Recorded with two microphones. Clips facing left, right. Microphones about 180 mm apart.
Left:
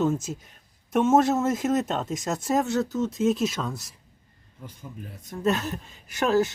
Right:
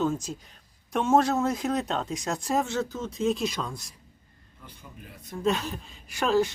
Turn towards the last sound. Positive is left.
turn(degrees=5)  # may be behind; listen again after turning